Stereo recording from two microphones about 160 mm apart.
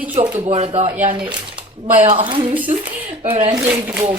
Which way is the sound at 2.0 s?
30° right (ahead or behind).